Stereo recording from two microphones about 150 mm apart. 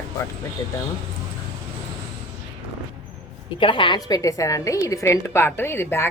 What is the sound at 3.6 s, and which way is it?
A woman's voice, 35° left (ahead or behind).